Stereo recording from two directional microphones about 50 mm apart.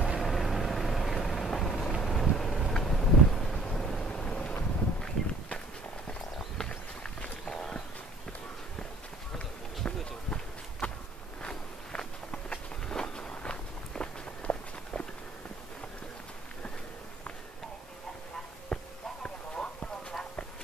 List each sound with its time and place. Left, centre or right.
0.2 s vehicle: centre
5.0 s walk: centre
6.0 s clip-clop: centre
7.0 s walk: centre
9.8 s run: left
11.4 s walk: centre
18.7 s a sound: centre
19.2 s clip-clop: centre